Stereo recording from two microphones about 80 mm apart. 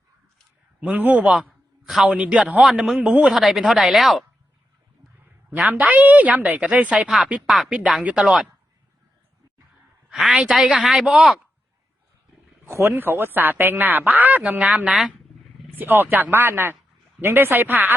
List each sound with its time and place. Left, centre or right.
0.8 s a man's voice: centre
3.3 s speech: centre
5.5 s a woman's voice: centre
10.1 s speech: centre
12.6 s a man's voice: right
14.8 s speech: centre
15.8 s a man's voice: right